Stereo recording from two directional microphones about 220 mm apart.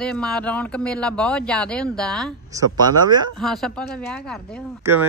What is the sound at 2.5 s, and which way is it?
Speech, 15° right (ahead or behind).